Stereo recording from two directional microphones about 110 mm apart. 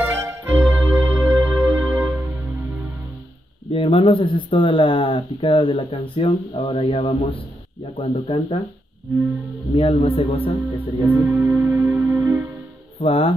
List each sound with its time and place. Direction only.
0.0 s music: 20° right (ahead or behind)
3.7 s speech: 50° left (ahead or behind)
9.8 s speech: 60° left (ahead or behind)
10.8 s music: 20° right (ahead or behind)
13.0 s speech: 55° left (ahead or behind)